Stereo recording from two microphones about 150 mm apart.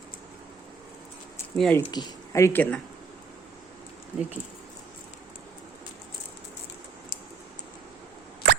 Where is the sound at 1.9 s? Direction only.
30° left (ahead or behind); by 2.8 s 10° left (ahead or behind).